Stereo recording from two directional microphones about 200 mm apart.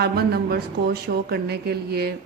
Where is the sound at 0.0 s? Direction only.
55° right (ahead or behind).